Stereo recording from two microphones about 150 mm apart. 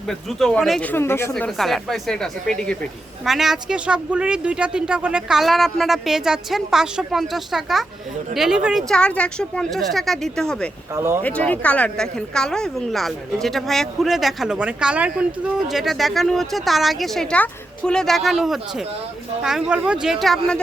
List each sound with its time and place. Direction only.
0.1 s speech: centre (ahead or behind)
1.3 s a woman's voice: 5° left (ahead or behind)
8.9 s a woman's voice: 5° left (ahead or behind)
10.9 s speech: 20° right (ahead or behind)
11.2 s a woman's voice: 10° left (ahead or behind)